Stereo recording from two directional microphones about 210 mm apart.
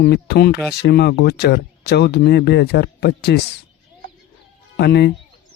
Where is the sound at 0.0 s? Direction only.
50° left (ahead or behind).